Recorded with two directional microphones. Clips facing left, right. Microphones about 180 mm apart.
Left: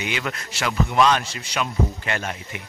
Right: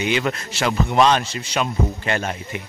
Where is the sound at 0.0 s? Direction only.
30° right (ahead or behind).